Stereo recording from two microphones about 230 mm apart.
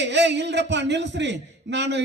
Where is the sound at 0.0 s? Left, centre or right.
Right.